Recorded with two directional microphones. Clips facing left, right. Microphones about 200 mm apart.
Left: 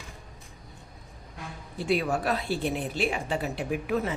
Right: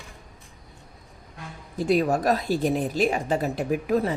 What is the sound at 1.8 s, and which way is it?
A woman's voice, 40° right (ahead or behind).